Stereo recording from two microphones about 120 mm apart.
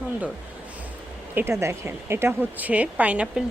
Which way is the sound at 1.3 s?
20° right (ahead or behind).